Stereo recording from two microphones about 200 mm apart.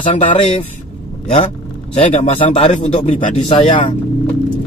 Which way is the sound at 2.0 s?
35° left (ahead or behind).